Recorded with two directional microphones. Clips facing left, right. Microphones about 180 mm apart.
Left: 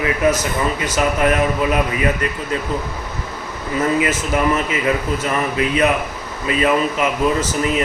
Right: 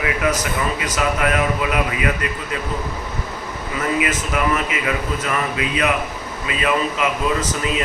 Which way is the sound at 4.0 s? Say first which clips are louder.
Left 3 dB; 30° left (ahead or behind).